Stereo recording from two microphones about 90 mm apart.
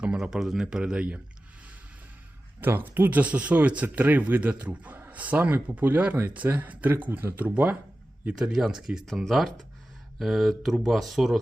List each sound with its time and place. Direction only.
0.0 s speech: 10° right (ahead or behind)
2.6 s speech: 20° right (ahead or behind); by 11.3 s centre (ahead or behind)